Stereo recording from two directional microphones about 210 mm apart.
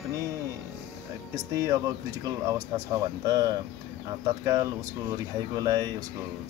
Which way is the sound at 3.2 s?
15° right (ahead or behind).